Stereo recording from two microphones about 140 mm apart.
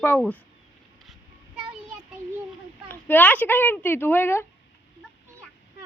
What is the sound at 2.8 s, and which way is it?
Speech, 15° left (ahead or behind).